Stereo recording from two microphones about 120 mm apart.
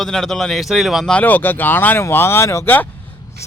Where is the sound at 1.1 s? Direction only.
15° left (ahead or behind).